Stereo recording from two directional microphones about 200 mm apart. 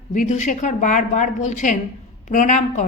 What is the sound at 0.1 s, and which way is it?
A woman's voice, 40° left (ahead or behind).